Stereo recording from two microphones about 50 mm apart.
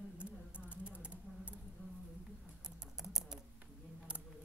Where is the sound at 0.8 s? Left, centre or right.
Right.